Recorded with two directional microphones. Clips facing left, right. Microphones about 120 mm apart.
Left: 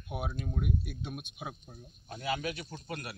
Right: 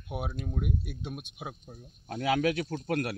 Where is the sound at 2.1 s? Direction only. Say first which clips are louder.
Right 8 dB; 90° right.